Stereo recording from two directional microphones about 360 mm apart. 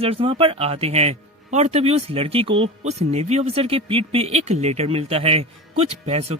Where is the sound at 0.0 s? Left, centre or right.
Centre.